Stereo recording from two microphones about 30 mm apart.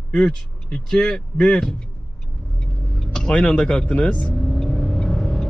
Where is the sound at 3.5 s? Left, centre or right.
Left.